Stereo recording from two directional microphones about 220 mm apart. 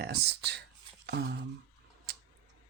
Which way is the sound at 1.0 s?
50° right (ahead or behind).